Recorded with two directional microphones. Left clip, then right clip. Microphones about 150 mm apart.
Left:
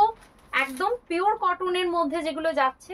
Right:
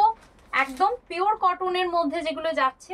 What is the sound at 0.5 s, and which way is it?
A woman's voice, 20° left (ahead or behind).